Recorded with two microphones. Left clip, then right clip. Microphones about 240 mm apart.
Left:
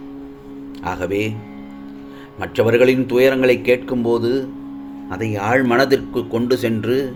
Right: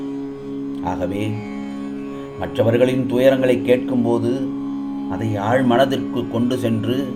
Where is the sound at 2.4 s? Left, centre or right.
Left.